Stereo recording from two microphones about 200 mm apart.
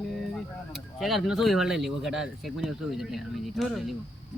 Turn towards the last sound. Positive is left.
turn(degrees=0)  # may be behind; listen again after turning